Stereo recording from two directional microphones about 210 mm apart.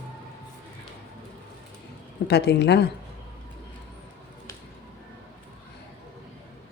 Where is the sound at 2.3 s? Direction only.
50° left (ahead or behind).